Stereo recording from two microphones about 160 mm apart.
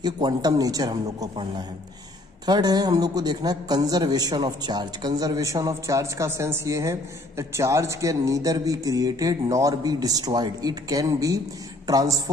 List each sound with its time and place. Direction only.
0.0 s a woman's voice: 25° right (ahead or behind)